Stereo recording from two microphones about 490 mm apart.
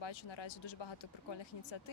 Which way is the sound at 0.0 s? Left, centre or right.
Left.